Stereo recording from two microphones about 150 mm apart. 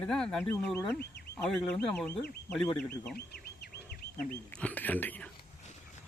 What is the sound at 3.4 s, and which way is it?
Bird, 90° left.